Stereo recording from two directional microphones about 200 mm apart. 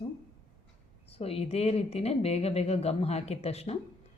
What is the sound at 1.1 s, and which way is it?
A woman's voice, 30° left (ahead or behind).